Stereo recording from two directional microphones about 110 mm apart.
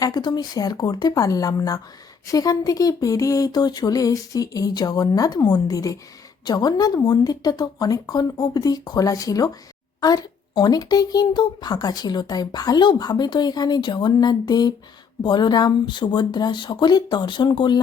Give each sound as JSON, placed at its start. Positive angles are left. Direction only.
{"t": 0.0, "sound": "speech", "side_deg": 40}